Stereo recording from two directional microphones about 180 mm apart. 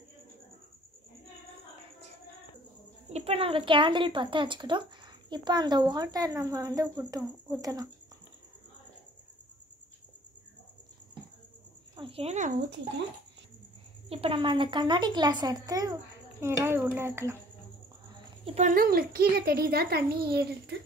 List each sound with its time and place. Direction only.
3.1 s speech: 35° right (ahead or behind)
12.0 s a sound: 30° right (ahead or behind)
14.0 s speech: 30° right (ahead or behind); by 17.4 s 15° right (ahead or behind)
18.4 s speech: 35° right (ahead or behind)
18.8 s a child's voice: 55° right (ahead or behind)